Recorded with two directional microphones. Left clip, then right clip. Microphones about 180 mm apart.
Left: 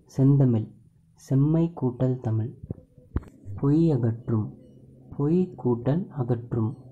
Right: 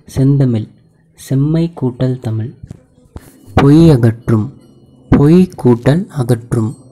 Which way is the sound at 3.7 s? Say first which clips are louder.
Right 13 dB; 30° right (ahead or behind).